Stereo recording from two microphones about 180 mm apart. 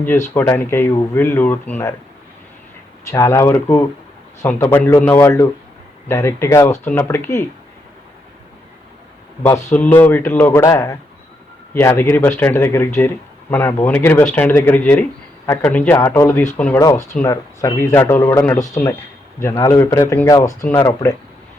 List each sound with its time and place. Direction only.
0.3 s speech: 15° left (ahead or behind)
3.1 s speech: 15° left (ahead or behind)
9.7 s speech: 10° left (ahead or behind)
16.8 s speech: 20° left (ahead or behind)